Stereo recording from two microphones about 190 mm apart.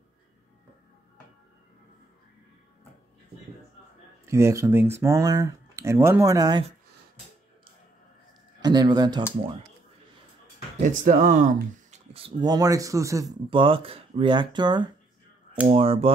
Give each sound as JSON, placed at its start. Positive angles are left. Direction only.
{"t": 4.3, "sound": "speech", "side_deg": -15}
{"t": 8.5, "sound": "a man's voice", "side_deg": -20}
{"t": 10.8, "sound": "speech", "side_deg": -45}
{"t": 13.5, "sound": "speech", "side_deg": -30}